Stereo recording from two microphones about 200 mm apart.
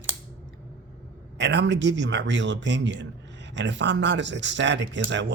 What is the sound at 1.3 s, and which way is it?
A man's voice, 60° right (ahead or behind).